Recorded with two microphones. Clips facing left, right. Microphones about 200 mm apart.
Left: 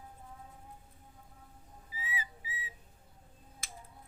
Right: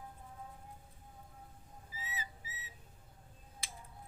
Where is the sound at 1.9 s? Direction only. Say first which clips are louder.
Left 4 dB; 15° left (ahead or behind).